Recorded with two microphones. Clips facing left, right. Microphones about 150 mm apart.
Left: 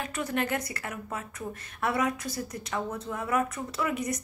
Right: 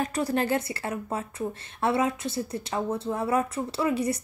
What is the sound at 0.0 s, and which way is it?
A woman's voice, 35° right (ahead or behind).